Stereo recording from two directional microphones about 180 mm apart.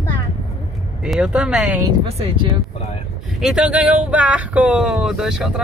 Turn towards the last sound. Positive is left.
turn(degrees=-5)  # may be behind; listen again after turning